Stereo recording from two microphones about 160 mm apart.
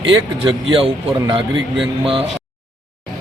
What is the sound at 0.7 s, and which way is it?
Speech, 35° right (ahead or behind).